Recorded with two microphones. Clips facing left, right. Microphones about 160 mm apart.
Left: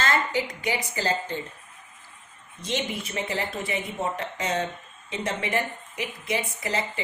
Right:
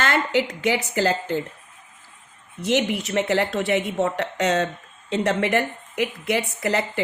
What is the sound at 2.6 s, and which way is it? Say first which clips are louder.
Speech: right 8 dB; 70° right (ahead or behind).